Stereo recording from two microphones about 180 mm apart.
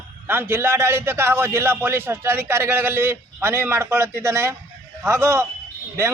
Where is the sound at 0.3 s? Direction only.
10° right (ahead or behind).